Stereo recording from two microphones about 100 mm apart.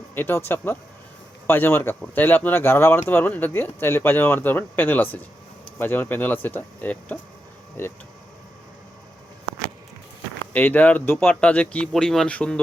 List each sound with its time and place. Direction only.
0.1 s speech: 20° left (ahead or behind)
10.5 s speech: 15° left (ahead or behind)